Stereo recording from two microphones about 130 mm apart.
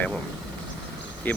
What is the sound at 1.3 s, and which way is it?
Speech, 15° left (ahead or behind).